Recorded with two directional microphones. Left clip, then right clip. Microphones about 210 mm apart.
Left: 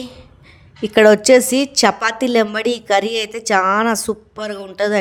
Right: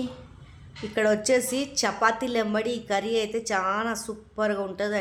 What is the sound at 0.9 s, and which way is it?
A woman's voice, 40° left (ahead or behind).